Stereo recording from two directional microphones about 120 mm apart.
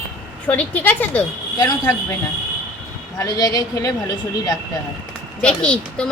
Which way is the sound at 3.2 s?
30° left (ahead or behind).